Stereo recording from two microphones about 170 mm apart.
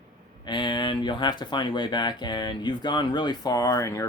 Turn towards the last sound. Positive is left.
turn(degrees=20)  # may be behind; listen again after turning